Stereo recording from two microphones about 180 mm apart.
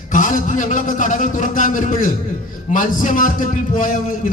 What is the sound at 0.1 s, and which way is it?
A man's voice, 45° left (ahead or behind).